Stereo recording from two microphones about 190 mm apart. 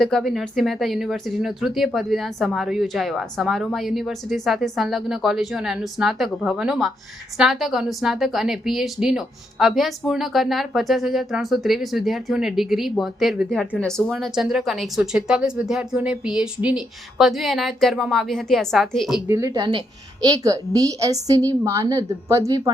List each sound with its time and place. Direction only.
0.0 s a woman's voice: centre (ahead or behind)
19.3 s a woman's voice: 20° right (ahead or behind)